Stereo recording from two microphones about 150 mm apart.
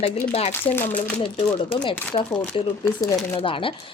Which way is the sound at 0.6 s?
15° left (ahead or behind).